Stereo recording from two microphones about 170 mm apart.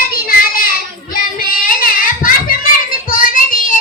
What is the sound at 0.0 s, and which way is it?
Child singing, 60° left (ahead or behind).